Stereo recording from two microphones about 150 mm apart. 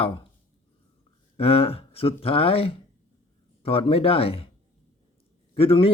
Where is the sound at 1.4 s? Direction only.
40° left (ahead or behind).